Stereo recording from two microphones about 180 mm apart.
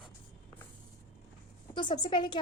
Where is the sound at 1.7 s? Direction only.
25° left (ahead or behind).